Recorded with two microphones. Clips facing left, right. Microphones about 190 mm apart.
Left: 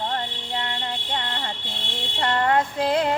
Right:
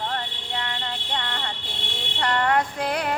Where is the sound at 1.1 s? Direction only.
25° left (ahead or behind).